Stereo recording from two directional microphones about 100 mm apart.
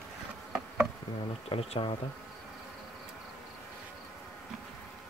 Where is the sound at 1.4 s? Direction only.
70° left (ahead or behind).